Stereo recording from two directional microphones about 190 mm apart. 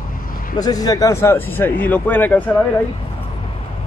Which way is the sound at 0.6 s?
20° left (ahead or behind).